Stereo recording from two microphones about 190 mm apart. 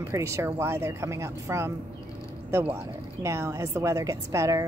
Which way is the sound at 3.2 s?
15° right (ahead or behind).